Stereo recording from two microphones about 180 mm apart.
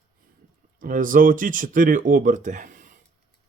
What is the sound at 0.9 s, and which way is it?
Speech, 50° right (ahead or behind).